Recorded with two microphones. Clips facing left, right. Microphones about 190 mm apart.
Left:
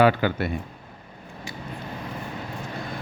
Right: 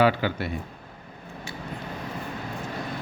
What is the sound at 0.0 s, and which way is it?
Speech, 55° left (ahead or behind).